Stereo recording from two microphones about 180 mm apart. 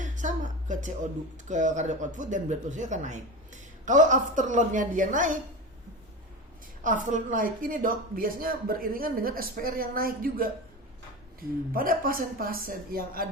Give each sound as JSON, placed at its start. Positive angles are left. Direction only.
{"t": 0.0, "sound": "a sound", "side_deg": -45}
{"t": 1.5, "sound": "speech", "side_deg": -45}
{"t": 6.8, "sound": "speech", "side_deg": -45}